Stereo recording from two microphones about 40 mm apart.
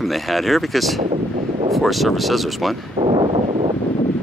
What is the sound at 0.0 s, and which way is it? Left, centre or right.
Speech, centre.